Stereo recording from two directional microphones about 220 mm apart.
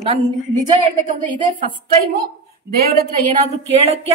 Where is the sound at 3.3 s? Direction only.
25° right (ahead or behind).